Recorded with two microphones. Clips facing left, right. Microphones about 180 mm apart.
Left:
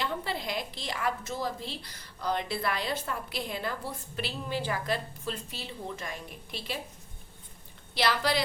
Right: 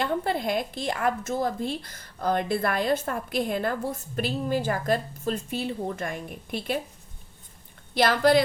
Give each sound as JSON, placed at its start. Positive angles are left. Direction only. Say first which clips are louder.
{"t": 0.0, "sound": "a woman's voice", "louder": "right 7 dB", "side_deg": -50}
{"t": 7.9, "sound": "a woman's voice", "louder": "right 8 dB", "side_deg": -50}